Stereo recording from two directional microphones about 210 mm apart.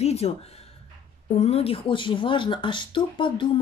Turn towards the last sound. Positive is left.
turn(degrees=25)  # may be behind; listen again after turning